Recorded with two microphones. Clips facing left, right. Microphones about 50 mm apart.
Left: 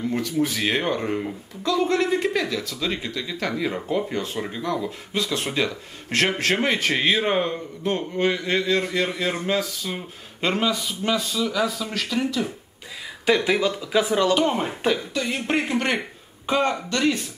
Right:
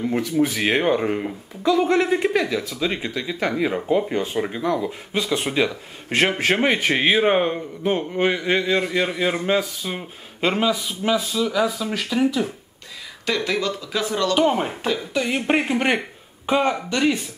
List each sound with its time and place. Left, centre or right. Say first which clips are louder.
0.0 s speech: right 3 dB; centre
13.2 s speech: left 3 dB; centre
14.3 s speech: right 2 dB; centre
15.1 s speech: right 3 dB; centre